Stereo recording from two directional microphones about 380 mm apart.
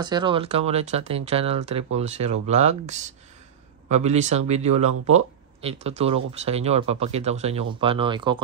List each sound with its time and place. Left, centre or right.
0.0 s speech: centre